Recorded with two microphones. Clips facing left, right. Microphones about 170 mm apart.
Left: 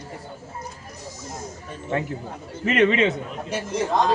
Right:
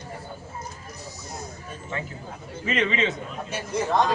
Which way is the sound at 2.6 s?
60° left (ahead or behind).